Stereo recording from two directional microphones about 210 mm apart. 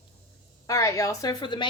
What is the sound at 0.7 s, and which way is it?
A woman's voice, 15° left (ahead or behind).